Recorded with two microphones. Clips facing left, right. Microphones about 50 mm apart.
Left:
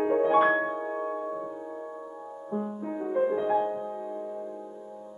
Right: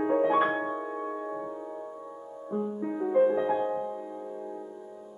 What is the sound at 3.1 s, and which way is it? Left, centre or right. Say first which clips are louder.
Music: right 3 dB; centre.